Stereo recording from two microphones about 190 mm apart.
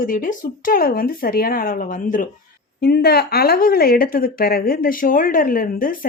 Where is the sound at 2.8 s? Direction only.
55° left (ahead or behind).